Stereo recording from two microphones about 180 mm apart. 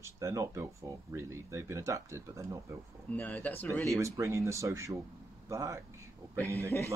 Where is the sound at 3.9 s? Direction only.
15° right (ahead or behind).